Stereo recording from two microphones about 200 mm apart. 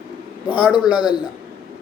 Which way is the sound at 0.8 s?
20° left (ahead or behind).